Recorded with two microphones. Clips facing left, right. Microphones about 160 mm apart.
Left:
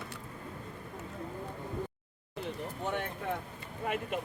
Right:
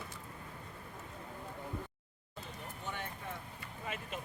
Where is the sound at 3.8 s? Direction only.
60° left (ahead or behind).